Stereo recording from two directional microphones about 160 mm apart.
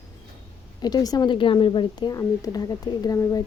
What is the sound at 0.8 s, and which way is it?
Speech, 25° left (ahead or behind).